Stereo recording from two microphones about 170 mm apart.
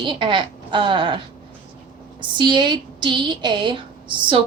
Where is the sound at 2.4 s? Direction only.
25° right (ahead or behind).